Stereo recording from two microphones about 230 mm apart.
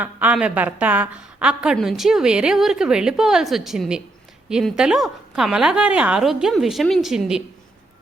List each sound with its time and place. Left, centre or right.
0.0 s a woman's voice: centre